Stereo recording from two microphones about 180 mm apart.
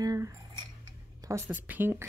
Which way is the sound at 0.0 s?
20° right (ahead or behind).